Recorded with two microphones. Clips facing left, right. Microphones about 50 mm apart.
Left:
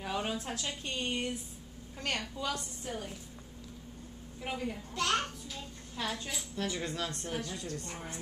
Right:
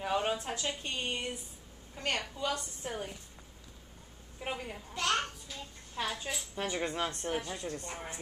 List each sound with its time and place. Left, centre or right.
0.0 s a woman's voice: centre
2.3 s a child's voice: centre
2.8 s speech: right
4.4 s a child's voice: centre
6.5 s speech: right